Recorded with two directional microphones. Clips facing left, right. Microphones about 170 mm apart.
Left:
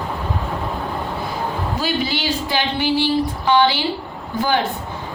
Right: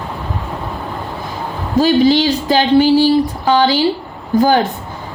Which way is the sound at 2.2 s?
40° right (ahead or behind).